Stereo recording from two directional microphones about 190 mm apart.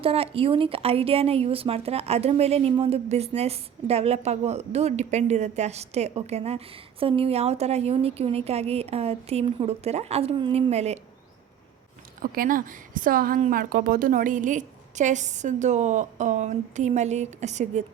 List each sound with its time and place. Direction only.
0.0 s speech: 30° right (ahead or behind)
12.2 s speech: 45° right (ahead or behind)